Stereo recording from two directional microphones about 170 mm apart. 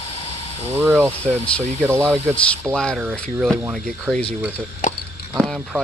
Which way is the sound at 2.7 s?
5° left (ahead or behind).